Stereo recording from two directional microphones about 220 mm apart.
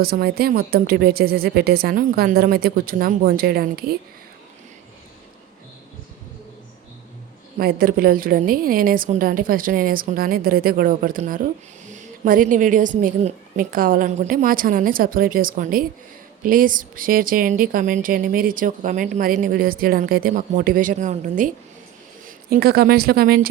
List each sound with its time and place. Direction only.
0.0 s a woman's voice: 45° right (ahead or behind)
7.6 s a woman's voice: 40° right (ahead or behind)